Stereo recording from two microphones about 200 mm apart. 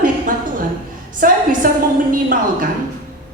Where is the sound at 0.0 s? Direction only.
45° right (ahead or behind).